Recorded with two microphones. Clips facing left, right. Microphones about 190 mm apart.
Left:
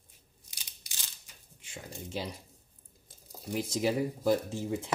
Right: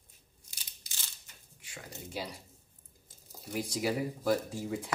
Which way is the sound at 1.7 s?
25° left (ahead or behind).